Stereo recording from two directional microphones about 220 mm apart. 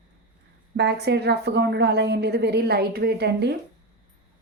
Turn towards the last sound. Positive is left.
turn(degrees=-50)  # may be behind; listen again after turning